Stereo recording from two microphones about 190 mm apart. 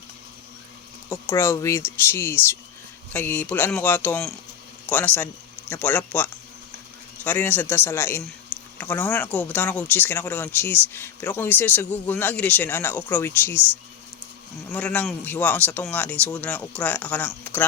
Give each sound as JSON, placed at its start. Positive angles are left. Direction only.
{"t": 1.1, "sound": "speech", "side_deg": 15}
{"t": 14.7, "sound": "speech", "side_deg": 5}